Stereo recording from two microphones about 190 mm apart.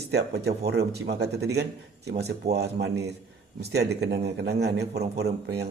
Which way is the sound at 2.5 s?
60° right (ahead or behind).